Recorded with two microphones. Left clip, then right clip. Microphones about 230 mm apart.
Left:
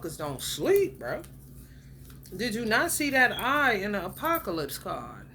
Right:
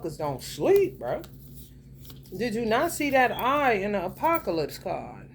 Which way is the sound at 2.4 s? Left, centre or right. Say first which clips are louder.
Right 1 dB; centre.